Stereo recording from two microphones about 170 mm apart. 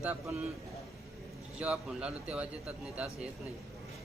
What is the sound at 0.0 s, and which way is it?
Speech, 10° right (ahead or behind).